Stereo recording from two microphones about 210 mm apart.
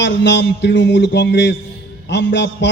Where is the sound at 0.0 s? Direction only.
55° left (ahead or behind).